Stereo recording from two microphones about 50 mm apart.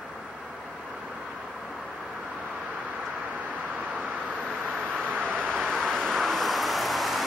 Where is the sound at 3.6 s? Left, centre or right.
Right.